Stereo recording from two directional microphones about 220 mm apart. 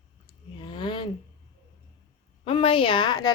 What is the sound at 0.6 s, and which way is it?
Speech, 20° left (ahead or behind).